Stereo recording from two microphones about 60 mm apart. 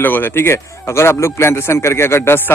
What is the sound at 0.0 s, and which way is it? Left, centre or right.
A man's voice, left.